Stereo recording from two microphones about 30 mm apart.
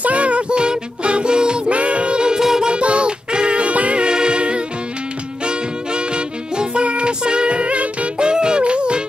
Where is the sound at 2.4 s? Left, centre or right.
Centre.